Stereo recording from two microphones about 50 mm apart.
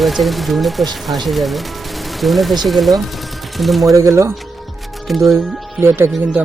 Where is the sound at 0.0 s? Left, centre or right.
Centre.